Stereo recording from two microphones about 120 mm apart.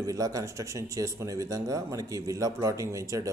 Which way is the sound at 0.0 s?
30° right (ahead or behind).